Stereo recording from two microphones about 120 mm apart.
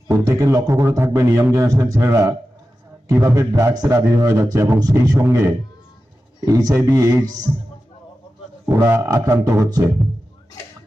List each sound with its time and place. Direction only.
0.1 s a man's voice: 25° right (ahead or behind)
6.4 s a man's voice: 30° right (ahead or behind)
8.6 s a man's voice: 20° right (ahead or behind)